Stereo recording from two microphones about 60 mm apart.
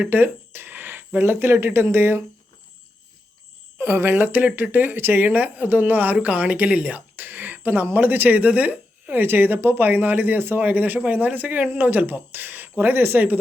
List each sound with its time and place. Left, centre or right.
0.0 s speech: right
3.8 s a woman's voice: right